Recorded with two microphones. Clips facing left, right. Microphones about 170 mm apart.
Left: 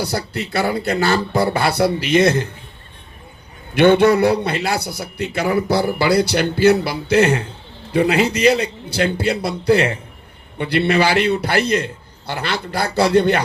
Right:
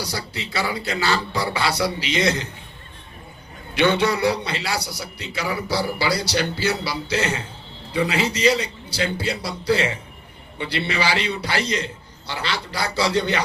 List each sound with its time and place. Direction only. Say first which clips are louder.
0.0 s a man's voice: left 7 dB; 55° left (ahead or behind)
3.8 s a man's voice: left 7 dB; 55° left (ahead or behind)